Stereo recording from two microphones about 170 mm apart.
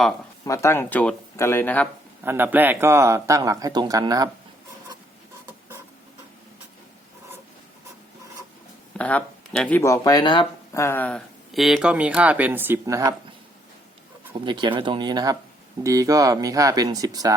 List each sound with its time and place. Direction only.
0.4 s speech: 20° left (ahead or behind)
2.2 s a man's voice: 10° right (ahead or behind)
9.0 s speech: 10° left (ahead or behind); by 10.4 s 25° left (ahead or behind)
10.8 s speech: 15° left (ahead or behind); by 13.1 s 20° right (ahead or behind)
14.4 s a man's voice: 25° right (ahead or behind)